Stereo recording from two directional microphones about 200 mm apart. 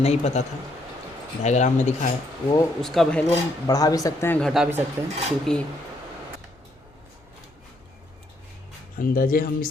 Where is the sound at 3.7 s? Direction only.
20° left (ahead or behind).